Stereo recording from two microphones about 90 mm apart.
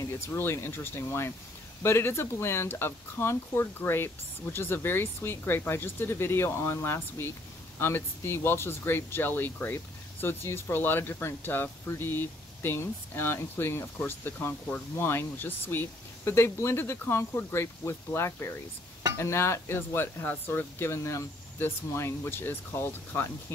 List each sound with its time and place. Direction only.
0.3 s speech: 25° left (ahead or behind)